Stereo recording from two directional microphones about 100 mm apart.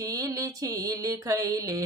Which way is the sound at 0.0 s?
35° right (ahead or behind).